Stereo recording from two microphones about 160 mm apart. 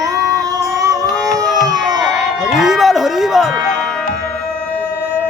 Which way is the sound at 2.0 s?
5° right (ahead or behind).